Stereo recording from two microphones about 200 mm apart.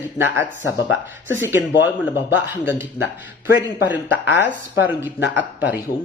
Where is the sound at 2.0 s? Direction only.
10° right (ahead or behind).